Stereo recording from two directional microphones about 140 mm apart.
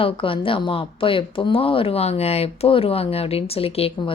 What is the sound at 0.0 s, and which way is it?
A woman's voice, 40° left (ahead or behind).